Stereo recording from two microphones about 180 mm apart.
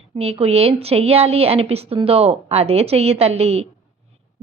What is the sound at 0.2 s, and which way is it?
A woman's voice, 35° right (ahead or behind).